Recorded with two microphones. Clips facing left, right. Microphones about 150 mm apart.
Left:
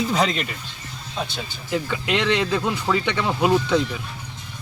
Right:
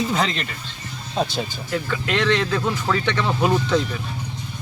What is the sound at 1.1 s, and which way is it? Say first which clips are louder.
Speech: right 6 dB; 40° right (ahead or behind).